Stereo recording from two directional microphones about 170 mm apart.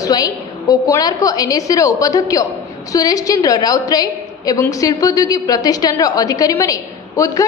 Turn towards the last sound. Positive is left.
turn(degrees=20)  # may be behind; listen again after turning